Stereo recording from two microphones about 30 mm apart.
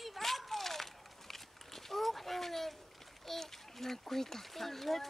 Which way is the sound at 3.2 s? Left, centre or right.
Centre.